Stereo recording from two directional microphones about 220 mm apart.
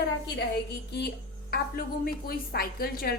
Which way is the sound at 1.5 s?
40° left (ahead or behind).